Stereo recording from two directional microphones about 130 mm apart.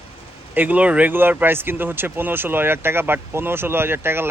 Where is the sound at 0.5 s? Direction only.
10° right (ahead or behind).